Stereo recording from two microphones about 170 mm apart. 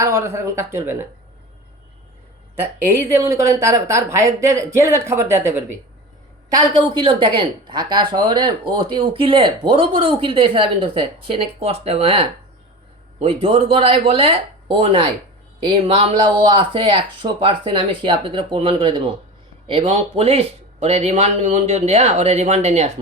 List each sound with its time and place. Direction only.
0.0 s speech: 15° right (ahead or behind)
3.2 s speech: 15° right (ahead or behind)
6.5 s speech: 30° right (ahead or behind)